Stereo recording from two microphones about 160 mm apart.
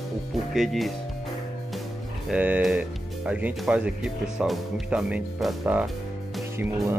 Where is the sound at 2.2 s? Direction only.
10° right (ahead or behind).